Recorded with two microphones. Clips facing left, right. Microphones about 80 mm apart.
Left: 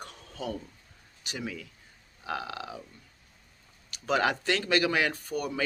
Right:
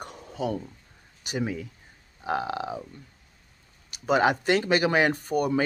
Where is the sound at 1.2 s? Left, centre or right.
Right.